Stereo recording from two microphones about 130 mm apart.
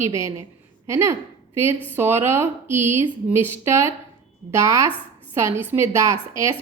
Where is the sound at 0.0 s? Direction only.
25° right (ahead or behind).